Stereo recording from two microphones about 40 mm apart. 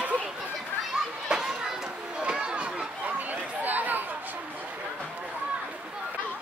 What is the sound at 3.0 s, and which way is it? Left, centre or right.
Chatter, right.